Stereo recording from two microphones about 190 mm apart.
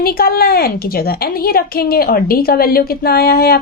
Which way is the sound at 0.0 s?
55° left (ahead or behind).